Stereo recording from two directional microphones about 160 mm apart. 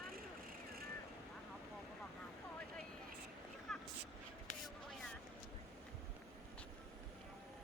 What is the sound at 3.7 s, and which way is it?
Vehicle, centre (ahead or behind).